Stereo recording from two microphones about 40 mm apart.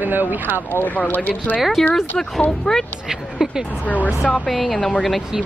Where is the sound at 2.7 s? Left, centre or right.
Left.